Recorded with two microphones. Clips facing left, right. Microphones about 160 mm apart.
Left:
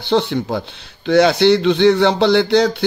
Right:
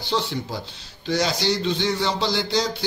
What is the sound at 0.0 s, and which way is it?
Speech, 60° left (ahead or behind).